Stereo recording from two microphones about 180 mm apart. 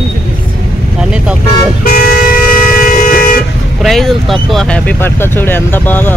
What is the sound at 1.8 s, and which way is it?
Vehicle, 55° left (ahead or behind).